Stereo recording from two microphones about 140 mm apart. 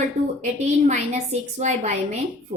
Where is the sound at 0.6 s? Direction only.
50° right (ahead or behind).